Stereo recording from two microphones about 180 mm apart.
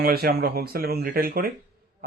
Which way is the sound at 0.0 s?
60° right (ahead or behind).